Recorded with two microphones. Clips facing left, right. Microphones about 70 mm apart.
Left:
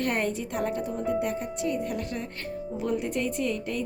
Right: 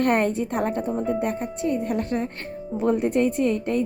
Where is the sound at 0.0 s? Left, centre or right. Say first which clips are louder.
Right 7 dB; right.